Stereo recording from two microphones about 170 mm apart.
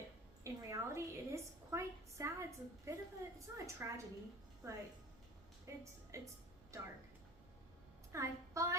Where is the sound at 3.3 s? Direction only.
20° right (ahead or behind).